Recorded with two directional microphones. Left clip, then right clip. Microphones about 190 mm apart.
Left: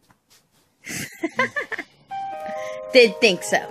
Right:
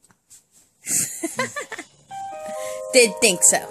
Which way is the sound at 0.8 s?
15° right (ahead or behind).